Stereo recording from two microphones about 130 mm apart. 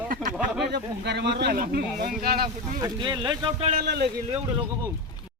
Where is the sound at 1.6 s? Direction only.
90° right.